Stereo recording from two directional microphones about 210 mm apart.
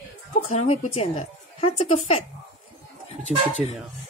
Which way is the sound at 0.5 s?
30° left (ahead or behind).